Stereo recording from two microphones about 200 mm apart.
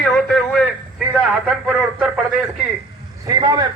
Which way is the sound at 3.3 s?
20° right (ahead or behind).